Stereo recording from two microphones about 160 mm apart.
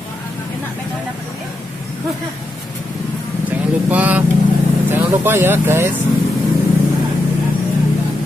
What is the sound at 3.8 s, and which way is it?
Speech, 10° right (ahead or behind).